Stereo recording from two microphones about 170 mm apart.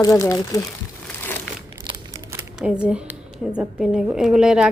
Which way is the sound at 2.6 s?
5° right (ahead or behind).